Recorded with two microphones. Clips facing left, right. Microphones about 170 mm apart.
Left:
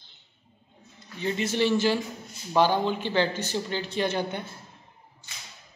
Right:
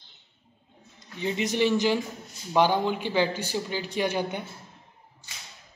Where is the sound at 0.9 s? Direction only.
15° right (ahead or behind).